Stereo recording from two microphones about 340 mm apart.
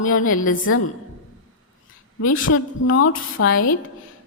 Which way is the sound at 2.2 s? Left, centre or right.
Left.